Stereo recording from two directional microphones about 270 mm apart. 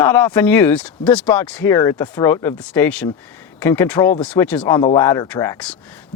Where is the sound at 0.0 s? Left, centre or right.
Centre.